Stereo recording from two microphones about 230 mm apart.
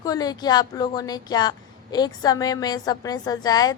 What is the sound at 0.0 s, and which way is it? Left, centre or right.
A woman's voice, centre.